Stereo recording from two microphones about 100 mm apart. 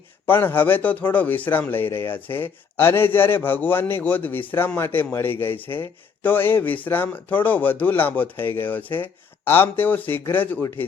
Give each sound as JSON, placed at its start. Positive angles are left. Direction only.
{"t": 0.3, "sound": "speech", "side_deg": 20}